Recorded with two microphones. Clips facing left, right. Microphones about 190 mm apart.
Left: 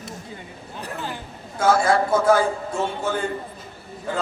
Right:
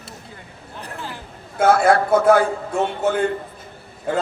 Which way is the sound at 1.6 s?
60° right (ahead or behind).